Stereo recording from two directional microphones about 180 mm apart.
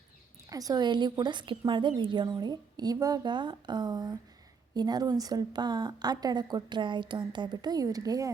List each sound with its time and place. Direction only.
0.5 s a woman's voice: 20° right (ahead or behind)